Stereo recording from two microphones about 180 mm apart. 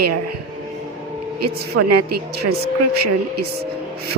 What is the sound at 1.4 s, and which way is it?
Speech, 60° right (ahead or behind).